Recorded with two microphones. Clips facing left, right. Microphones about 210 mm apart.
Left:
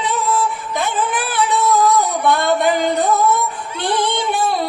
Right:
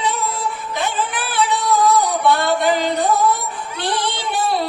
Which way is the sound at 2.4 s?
50° left (ahead or behind).